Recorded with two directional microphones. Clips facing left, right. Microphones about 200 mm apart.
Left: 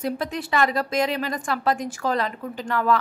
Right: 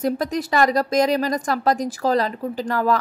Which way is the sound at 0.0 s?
40° right (ahead or behind).